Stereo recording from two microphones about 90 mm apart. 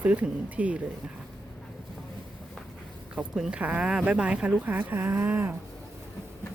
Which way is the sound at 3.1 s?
10° right (ahead or behind).